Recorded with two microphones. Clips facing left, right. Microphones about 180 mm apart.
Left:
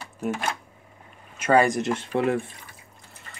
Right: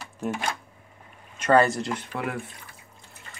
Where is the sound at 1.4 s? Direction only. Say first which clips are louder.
Even; 10° left (ahead or behind).